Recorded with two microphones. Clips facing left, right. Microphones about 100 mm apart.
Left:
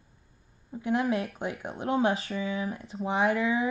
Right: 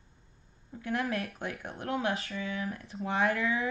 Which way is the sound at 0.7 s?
25° left (ahead or behind).